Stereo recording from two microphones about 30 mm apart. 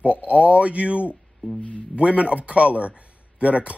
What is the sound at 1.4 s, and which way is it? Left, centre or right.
Speech, left.